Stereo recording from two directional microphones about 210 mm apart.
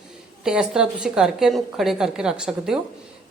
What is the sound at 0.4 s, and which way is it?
A woman's voice, 5° right (ahead or behind).